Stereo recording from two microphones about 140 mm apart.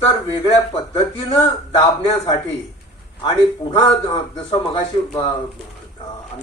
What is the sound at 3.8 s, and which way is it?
Speech, 45° left (ahead or behind).